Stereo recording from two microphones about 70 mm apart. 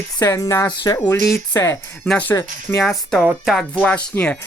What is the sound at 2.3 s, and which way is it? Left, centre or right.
Speech, left.